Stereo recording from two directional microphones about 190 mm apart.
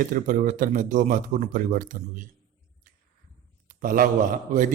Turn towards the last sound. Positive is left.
turn(degrees=-45)  # may be behind; listen again after turning